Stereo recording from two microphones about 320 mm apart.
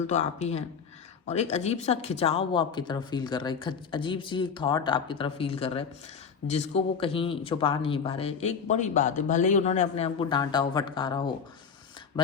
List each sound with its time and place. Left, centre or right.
0.1 s speech: left